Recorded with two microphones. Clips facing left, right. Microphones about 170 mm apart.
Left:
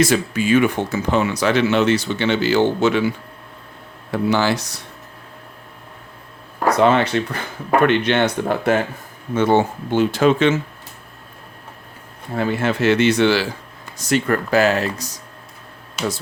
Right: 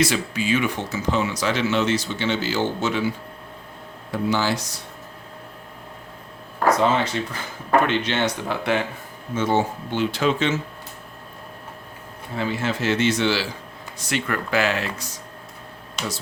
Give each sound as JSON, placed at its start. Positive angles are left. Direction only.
{"t": 0.0, "sound": "speech", "side_deg": 50}
{"t": 4.1, "sound": "speech", "side_deg": 65}
{"t": 6.7, "sound": "speech", "side_deg": 65}
{"t": 9.3, "sound": "speech", "side_deg": 60}
{"t": 12.3, "sound": "speech", "side_deg": 55}
{"t": 14.0, "sound": "speech", "side_deg": 40}
{"t": 16.0, "sound": "speech", "side_deg": 5}